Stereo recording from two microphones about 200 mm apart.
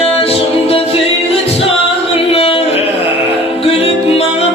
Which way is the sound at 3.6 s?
30° left (ahead or behind).